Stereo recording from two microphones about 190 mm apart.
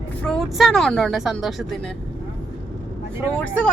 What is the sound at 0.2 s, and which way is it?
Speech, centre (ahead or behind).